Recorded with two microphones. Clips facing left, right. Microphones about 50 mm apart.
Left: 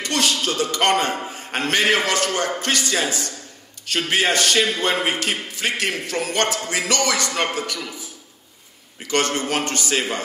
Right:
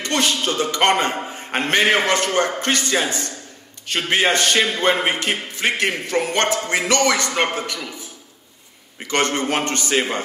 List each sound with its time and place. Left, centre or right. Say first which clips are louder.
0.0 s a man's voice: right 1 dB; right
9.0 s a man's voice: right 1 dB; right